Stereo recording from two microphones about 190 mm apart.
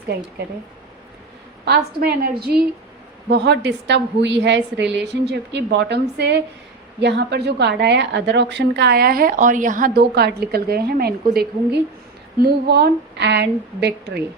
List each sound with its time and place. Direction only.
1.6 s a woman's voice: 55° right (ahead or behind)